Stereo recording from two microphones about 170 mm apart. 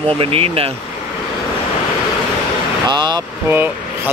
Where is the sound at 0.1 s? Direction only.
35° right (ahead or behind).